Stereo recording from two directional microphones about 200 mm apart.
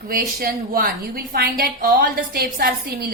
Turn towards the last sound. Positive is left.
turn(degrees=-50)  # may be behind; listen again after turning